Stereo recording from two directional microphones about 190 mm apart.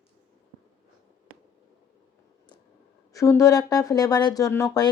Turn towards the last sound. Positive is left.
turn(degrees=20)  # may be behind; listen again after turning